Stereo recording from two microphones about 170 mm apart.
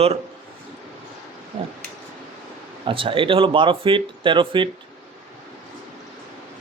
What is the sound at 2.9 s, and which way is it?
A man's voice, 30° right (ahead or behind).